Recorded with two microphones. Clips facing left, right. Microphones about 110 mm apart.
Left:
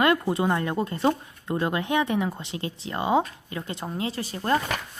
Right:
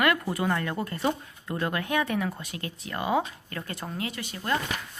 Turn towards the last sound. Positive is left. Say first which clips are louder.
# left 5 dB
turn(degrees=35)  # may be behind; listen again after turning